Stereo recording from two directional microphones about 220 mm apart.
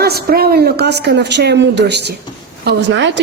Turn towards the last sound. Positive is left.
turn(degrees=-55)  # may be behind; listen again after turning